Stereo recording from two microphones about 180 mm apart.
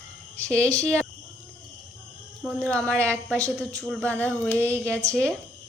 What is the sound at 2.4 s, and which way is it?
Speech, 5° left (ahead or behind).